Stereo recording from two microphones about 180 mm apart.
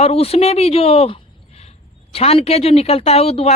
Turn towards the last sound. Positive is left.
turn(degrees=35)  # may be behind; listen again after turning